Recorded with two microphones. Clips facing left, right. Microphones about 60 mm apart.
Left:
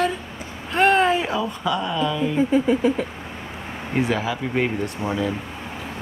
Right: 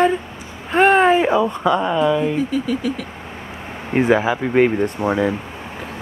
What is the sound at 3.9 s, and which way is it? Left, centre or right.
Speech, right.